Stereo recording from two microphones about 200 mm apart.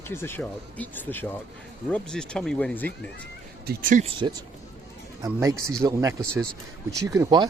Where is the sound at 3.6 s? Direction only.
40° right (ahead or behind).